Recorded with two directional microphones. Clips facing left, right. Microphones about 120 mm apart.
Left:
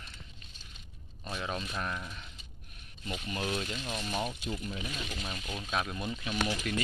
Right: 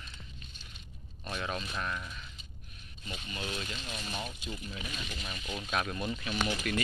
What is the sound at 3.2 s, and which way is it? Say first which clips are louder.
Speech: left 5 dB; 45° left (ahead or behind).